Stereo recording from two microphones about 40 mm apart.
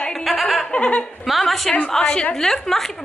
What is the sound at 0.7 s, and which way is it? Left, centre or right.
Laughter, left.